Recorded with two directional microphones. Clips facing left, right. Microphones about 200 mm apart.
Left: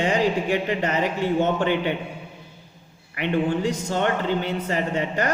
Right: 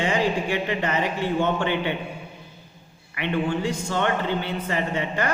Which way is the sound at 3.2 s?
45° left (ahead or behind).